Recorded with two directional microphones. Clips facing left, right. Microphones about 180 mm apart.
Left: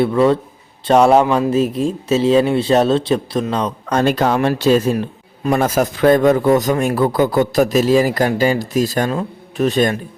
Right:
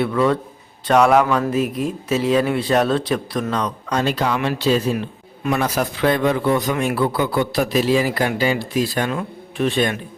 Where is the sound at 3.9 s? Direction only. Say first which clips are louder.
Left 5 dB; 50° left (ahead or behind).